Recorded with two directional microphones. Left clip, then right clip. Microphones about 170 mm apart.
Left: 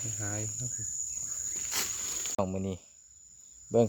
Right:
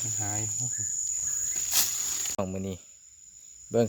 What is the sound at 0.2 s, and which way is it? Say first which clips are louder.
Speech: right 3 dB; 55° right (ahead or behind).